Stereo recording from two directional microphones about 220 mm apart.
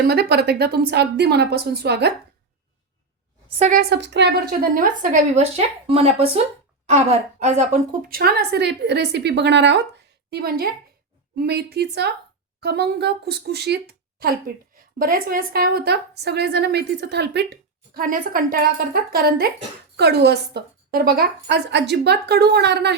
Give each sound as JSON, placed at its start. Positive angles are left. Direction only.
{"t": 0.1, "sound": "a woman's voice", "side_deg": -45}
{"t": 3.6, "sound": "a woman's voice", "side_deg": -40}